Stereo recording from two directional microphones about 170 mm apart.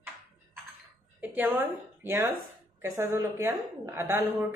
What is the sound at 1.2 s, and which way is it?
A woman's voice, 10° right (ahead or behind).